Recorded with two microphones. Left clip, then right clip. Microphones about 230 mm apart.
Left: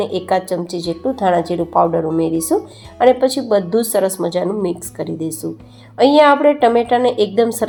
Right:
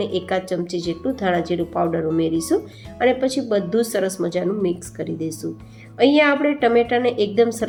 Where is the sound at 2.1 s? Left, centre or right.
Centre.